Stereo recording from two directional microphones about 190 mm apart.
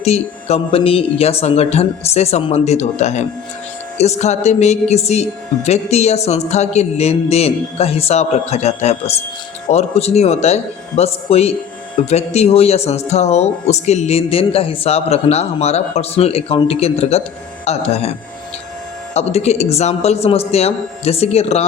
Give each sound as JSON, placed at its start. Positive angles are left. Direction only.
{"t": 0.0, "sound": "speech", "side_deg": 35}
{"t": 19.1, "sound": "speech", "side_deg": 35}